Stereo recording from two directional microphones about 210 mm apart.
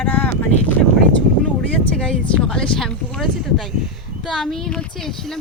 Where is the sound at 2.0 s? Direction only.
5° left (ahead or behind).